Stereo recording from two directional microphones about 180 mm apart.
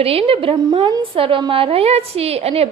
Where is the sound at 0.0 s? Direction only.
35° right (ahead or behind).